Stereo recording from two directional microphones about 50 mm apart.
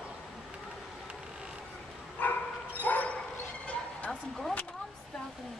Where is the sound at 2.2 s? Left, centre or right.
Left.